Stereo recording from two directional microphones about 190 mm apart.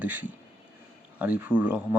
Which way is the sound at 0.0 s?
10° right (ahead or behind).